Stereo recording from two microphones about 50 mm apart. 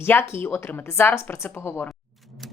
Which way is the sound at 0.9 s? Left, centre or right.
Left.